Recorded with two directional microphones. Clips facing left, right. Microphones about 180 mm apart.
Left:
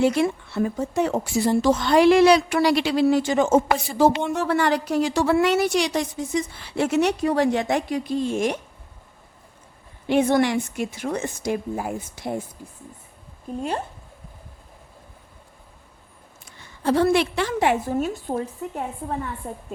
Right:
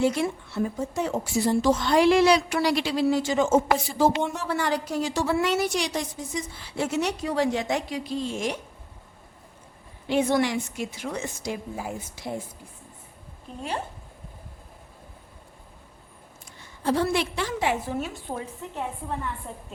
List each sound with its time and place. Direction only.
0.0 s a woman's voice: 70° left (ahead or behind); by 8.5 s 55° left (ahead or behind)
10.1 s a woman's voice: 55° left (ahead or behind)
16.8 s a woman's voice: 65° left (ahead or behind); by 18.4 s 45° left (ahead or behind)